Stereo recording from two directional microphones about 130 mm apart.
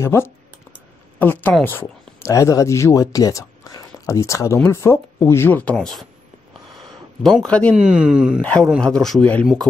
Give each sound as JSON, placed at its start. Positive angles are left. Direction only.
{"t": 0.0, "sound": "speech", "side_deg": 20}
{"t": 7.2, "sound": "speech", "side_deg": 5}
{"t": 7.7, "sound": "speech", "side_deg": -5}
{"t": 8.4, "sound": "a man's voice", "side_deg": 10}